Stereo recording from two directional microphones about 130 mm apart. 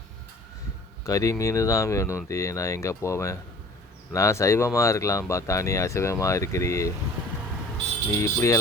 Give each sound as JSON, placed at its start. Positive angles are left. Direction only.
{"t": 1.0, "sound": "speech", "side_deg": 25}
{"t": 8.1, "sound": "speech", "side_deg": 20}